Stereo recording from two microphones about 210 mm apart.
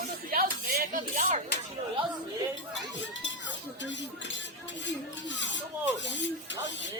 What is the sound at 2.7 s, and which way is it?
Speech, 60° left (ahead or behind).